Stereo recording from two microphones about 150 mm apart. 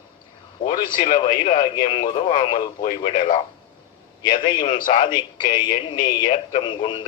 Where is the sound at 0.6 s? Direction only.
70° left (ahead or behind).